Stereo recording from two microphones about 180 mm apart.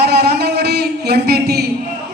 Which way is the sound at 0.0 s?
65° right (ahead or behind).